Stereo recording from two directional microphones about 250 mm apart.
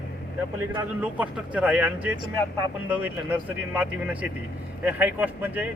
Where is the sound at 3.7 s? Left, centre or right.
Centre.